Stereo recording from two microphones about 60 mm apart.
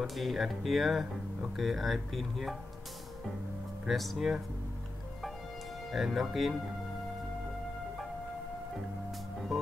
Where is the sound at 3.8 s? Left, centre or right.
Centre.